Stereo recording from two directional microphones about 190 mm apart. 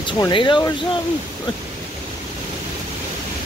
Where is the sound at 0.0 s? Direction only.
25° left (ahead or behind).